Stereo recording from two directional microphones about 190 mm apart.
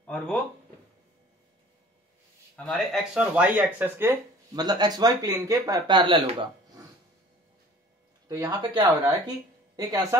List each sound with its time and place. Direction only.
0.0 s speech: 5° left (ahead or behind)
2.5 s speech: 5° left (ahead or behind); by 6.3 s 25° right (ahead or behind)
8.3 s speech: 20° right (ahead or behind)